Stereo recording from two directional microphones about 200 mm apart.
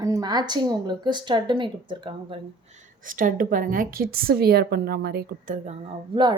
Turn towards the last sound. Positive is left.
turn(degrees=-25)  # may be behind; listen again after turning